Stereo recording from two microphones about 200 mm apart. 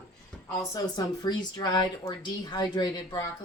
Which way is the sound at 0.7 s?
20° left (ahead or behind).